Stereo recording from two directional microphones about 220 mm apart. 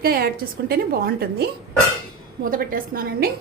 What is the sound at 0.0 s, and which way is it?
A woman's voice, 45° right (ahead or behind).